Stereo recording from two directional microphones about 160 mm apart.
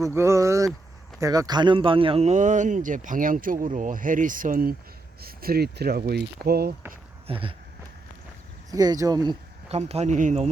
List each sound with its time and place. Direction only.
0.0 s speech: 15° right (ahead or behind); by 4.7 s 60° right (ahead or behind)
5.2 s speech: 70° right (ahead or behind)
7.3 s a sound: 35° right (ahead or behind)
8.7 s speech: 20° right (ahead or behind)
9.6 s speech: 40° right (ahead or behind)